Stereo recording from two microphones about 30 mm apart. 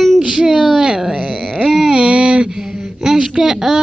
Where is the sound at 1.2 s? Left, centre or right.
Right.